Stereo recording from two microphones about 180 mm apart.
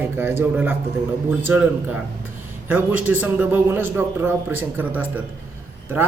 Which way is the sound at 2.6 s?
10° right (ahead or behind).